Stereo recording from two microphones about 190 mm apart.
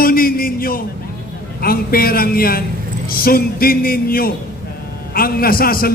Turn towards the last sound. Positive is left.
turn(degrees=50)  # may be behind; listen again after turning